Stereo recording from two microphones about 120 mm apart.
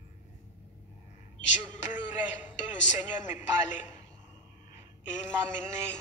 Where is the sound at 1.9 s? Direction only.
15° right (ahead or behind).